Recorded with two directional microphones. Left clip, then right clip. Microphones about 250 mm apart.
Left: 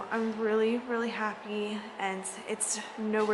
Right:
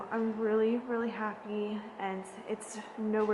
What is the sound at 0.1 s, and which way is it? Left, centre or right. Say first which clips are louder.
A woman's voice: left 1 dB; centre.